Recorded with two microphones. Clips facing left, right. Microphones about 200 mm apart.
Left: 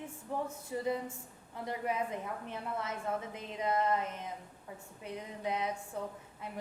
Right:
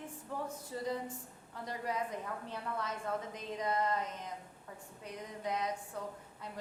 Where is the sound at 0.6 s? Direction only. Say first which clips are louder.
Left 3 dB; 10° left (ahead or behind).